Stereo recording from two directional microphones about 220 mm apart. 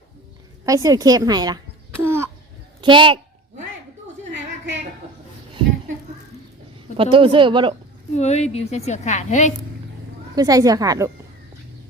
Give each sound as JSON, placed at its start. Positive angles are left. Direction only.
{"t": 0.6, "sound": "a woman's voice", "side_deg": -15}
{"t": 2.0, "sound": "a sound", "side_deg": -10}
{"t": 2.8, "sound": "speech", "side_deg": -20}
{"t": 4.3, "sound": "a sound", "side_deg": -55}
{"t": 6.9, "sound": "speech", "side_deg": -25}
{"t": 8.1, "sound": "a woman's voice", "side_deg": 30}
{"t": 10.3, "sound": "a woman's voice", "side_deg": -15}